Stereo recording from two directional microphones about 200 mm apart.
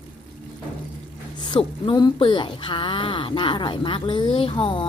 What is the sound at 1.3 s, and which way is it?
Speech, 20° left (ahead or behind).